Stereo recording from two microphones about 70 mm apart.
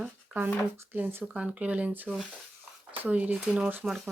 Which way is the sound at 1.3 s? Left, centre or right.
Centre.